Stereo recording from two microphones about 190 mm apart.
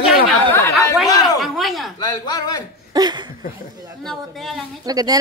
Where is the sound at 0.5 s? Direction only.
15° left (ahead or behind).